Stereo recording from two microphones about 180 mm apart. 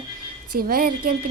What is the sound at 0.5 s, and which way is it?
Speech, 55° right (ahead or behind).